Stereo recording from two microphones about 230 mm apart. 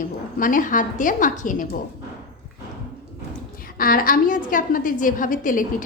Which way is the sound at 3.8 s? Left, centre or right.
Left.